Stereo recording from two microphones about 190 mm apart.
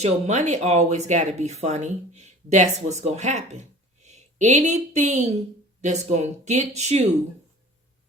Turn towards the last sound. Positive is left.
turn(degrees=-35)  # may be behind; listen again after turning